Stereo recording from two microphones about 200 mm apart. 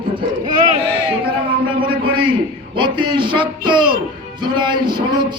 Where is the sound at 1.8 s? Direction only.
25° right (ahead or behind).